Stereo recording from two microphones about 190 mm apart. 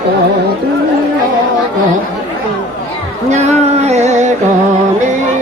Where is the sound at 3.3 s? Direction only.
35° right (ahead or behind).